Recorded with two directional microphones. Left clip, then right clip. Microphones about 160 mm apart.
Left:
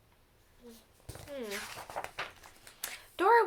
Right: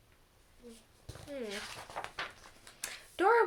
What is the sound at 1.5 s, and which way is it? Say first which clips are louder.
Speech: left 2 dB; 5° right (ahead or behind).